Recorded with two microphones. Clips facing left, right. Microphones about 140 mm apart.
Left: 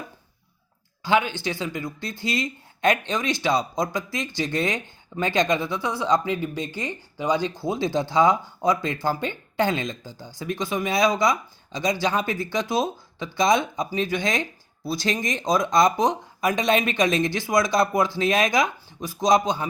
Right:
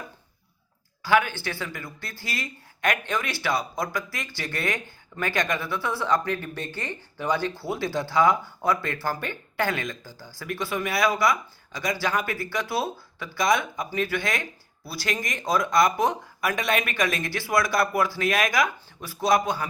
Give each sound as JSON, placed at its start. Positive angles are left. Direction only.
{"t": 1.0, "sound": "speech", "side_deg": 20}